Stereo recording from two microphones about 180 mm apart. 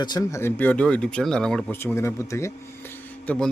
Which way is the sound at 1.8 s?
15° left (ahead or behind).